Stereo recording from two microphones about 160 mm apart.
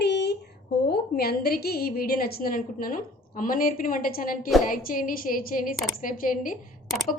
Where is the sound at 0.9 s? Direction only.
75° left (ahead or behind); by 6.5 s 55° left (ahead or behind).